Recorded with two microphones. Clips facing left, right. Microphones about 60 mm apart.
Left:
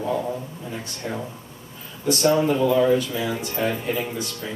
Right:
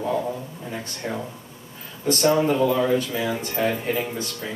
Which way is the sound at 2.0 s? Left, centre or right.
Right.